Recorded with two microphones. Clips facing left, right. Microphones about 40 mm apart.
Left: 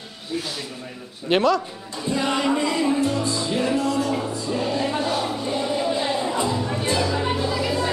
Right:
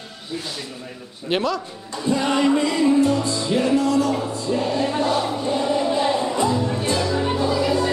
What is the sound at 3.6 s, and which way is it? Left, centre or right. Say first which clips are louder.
Music: right 4 dB; left.